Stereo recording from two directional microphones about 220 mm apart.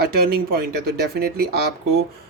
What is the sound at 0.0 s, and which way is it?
Speech, 45° right (ahead or behind).